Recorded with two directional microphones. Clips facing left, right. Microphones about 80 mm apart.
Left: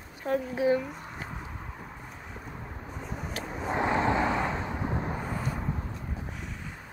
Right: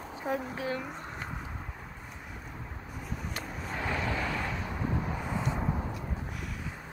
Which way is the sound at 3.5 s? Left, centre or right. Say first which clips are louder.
Left 8 dB; left.